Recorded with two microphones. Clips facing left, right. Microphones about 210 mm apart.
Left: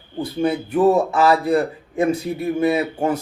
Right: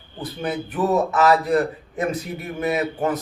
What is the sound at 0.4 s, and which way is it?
Speech, 30° left (ahead or behind).